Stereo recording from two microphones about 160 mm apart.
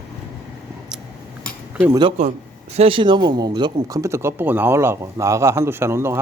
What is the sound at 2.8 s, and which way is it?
Speech, 35° right (ahead or behind).